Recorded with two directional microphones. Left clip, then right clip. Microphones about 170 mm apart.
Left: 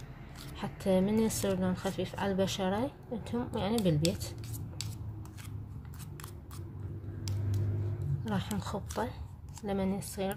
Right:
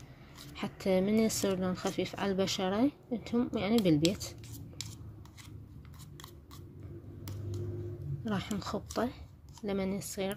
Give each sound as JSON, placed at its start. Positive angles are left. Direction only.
{"t": 0.6, "sound": "a woman's voice", "side_deg": -30}
{"t": 8.3, "sound": "speech", "side_deg": -30}